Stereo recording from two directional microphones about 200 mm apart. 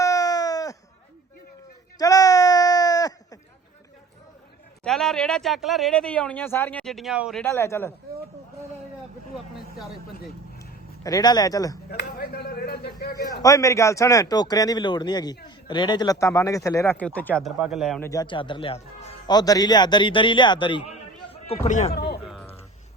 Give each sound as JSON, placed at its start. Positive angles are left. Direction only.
{"t": 0.0, "sound": "a sound", "side_deg": 15}
{"t": 2.0, "sound": "a sound", "side_deg": 20}
{"t": 4.8, "sound": "speech", "side_deg": 0}
{"t": 7.4, "sound": "speech", "side_deg": 15}
{"t": 11.0, "sound": "speech", "side_deg": 20}
{"t": 11.9, "sound": "speech", "side_deg": 50}
{"t": 13.4, "sound": "a man's voice", "side_deg": 15}
{"t": 18.0, "sound": "a man's voice", "side_deg": 20}
{"t": 22.2, "sound": "music", "side_deg": 0}